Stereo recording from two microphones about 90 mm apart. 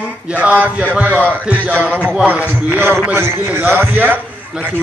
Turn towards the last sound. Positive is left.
turn(degrees=-20)  # may be behind; listen again after turning